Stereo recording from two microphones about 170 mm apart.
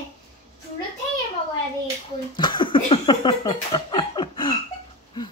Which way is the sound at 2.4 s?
25° left (ahead or behind).